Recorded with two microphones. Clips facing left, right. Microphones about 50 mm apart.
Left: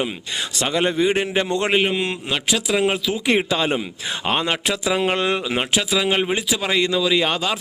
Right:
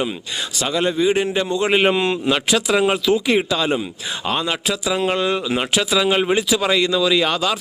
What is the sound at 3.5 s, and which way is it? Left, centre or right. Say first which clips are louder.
A man's voice: right 1 dB; left.